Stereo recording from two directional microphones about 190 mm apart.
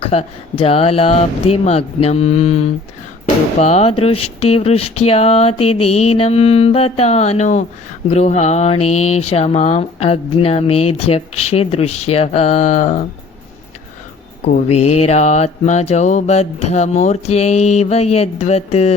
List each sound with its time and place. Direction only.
0.0 s speech: 30° left (ahead or behind)
14.4 s speech: 35° left (ahead or behind)